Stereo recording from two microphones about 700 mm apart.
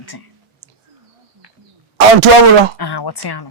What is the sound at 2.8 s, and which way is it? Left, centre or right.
Speech, left.